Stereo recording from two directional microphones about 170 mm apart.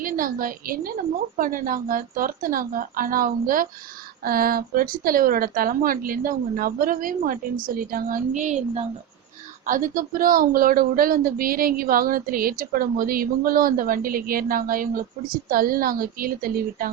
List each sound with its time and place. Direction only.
0.0 s a woman's voice: 55° right (ahead or behind)